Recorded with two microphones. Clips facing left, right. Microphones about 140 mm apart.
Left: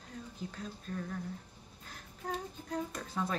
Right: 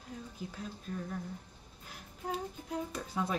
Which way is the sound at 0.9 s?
10° right (ahead or behind).